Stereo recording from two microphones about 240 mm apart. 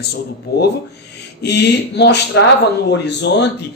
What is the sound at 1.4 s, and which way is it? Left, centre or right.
Speech, left.